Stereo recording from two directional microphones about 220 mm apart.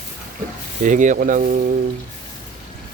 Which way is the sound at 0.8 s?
35° right (ahead or behind).